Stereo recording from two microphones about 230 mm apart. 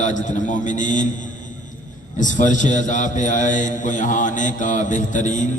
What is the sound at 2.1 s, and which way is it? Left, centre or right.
A man's voice, left.